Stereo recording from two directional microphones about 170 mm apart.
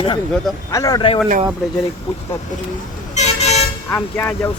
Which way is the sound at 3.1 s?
40° left (ahead or behind).